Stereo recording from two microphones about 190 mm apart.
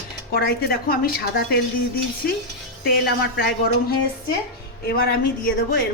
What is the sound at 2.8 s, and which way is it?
Speech, 55° left (ahead or behind).